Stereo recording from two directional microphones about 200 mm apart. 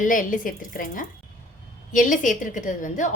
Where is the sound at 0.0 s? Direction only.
40° left (ahead or behind).